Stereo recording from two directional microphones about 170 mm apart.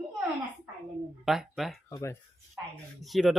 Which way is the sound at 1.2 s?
Centre (ahead or behind).